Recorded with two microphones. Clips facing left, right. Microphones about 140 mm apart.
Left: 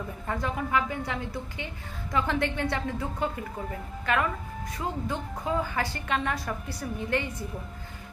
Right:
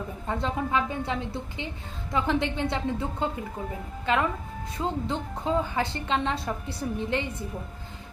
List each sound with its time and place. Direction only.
0.3 s a woman's voice: 20° right (ahead or behind)